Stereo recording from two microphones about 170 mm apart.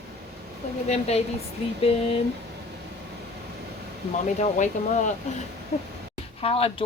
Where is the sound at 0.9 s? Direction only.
40° left (ahead or behind).